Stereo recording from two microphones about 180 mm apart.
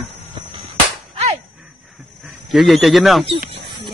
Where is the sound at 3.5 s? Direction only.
25° right (ahead or behind).